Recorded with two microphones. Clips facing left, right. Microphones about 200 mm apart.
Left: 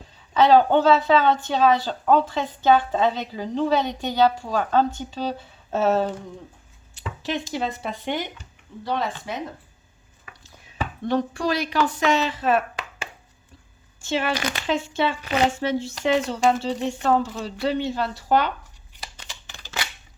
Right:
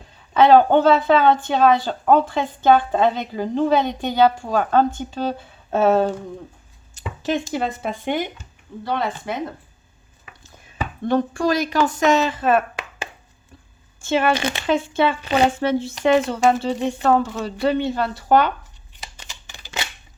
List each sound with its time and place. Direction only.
0.3 s speech: 55° right (ahead or behind)
7.2 s speech: 50° right (ahead or behind)
10.4 s speech: 50° right (ahead or behind)
14.0 s speech: 55° right (ahead or behind)
14.3 s speech: 25° right (ahead or behind)
14.7 s speech: 55° right (ahead or behind)
15.2 s speech: 30° right (ahead or behind)
15.4 s speech: 55° right (ahead or behind)
18.9 s a sound: 20° right (ahead or behind)